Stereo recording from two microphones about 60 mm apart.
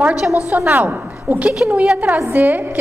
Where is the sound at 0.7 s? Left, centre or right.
Right.